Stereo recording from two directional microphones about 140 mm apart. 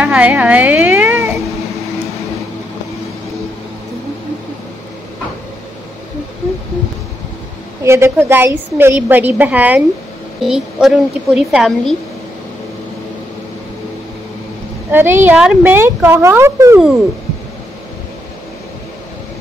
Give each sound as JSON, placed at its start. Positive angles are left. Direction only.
{"t": 0.0, "sound": "a woman's voice", "side_deg": -10}
{"t": 7.8, "sound": "a woman's voice", "side_deg": -20}
{"t": 14.9, "sound": "a woman's voice", "side_deg": -15}